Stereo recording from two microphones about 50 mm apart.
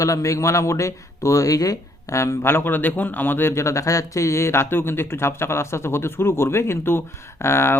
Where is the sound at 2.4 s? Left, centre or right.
Left.